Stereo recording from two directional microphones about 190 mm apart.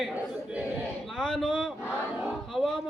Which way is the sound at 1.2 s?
Centre (ahead or behind).